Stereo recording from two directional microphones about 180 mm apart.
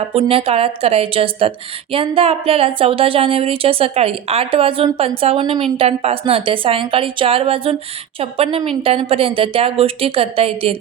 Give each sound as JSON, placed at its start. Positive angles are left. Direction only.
{"t": 0.1, "sound": "a woman's voice", "side_deg": -30}